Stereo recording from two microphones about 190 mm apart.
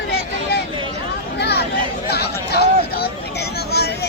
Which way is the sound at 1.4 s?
60° left (ahead or behind).